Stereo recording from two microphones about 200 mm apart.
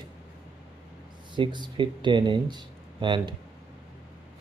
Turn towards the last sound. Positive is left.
turn(degrees=-25)  # may be behind; listen again after turning